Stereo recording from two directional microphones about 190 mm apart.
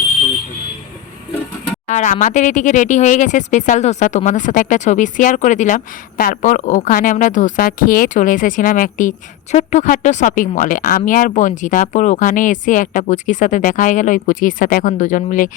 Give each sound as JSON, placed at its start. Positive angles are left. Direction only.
{"t": 1.9, "sound": "speech", "side_deg": 40}